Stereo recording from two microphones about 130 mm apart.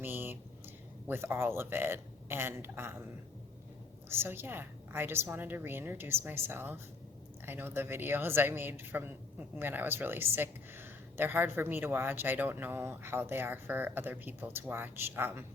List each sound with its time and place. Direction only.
0.0 s speech: 15° right (ahead or behind)
4.1 s speech: 20° right (ahead or behind)